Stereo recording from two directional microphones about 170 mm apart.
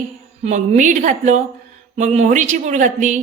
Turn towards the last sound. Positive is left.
turn(degrees=-45)  # may be behind; listen again after turning